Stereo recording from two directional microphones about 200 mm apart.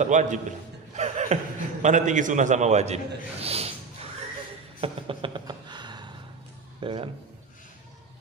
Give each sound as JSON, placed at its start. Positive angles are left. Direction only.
{"t": 0.0, "sound": "a man's voice", "side_deg": -40}
{"t": 4.7, "sound": "a sound", "side_deg": -25}
{"t": 6.8, "sound": "speech", "side_deg": -25}